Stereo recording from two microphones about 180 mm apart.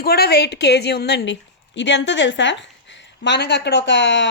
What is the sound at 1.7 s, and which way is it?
A woman's voice, 80° left.